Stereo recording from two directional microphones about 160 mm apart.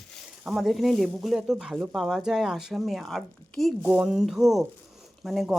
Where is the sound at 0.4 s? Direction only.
Centre (ahead or behind).